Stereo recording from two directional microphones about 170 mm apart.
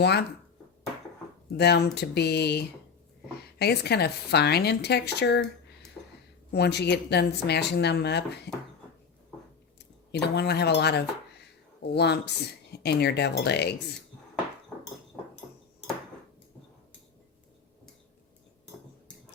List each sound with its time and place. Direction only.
0.0 s speech: 75° left (ahead or behind)
1.5 s speech: 70° left (ahead or behind)
6.5 s speech: 75° left (ahead or behind)
10.1 s speech: 75° left (ahead or behind)